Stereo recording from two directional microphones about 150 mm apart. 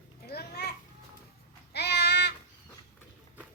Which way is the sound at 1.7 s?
90° left.